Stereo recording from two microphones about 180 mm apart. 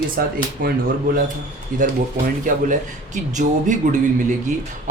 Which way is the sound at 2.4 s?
45° right (ahead or behind).